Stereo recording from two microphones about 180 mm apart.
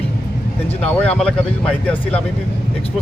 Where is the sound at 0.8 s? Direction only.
5° left (ahead or behind).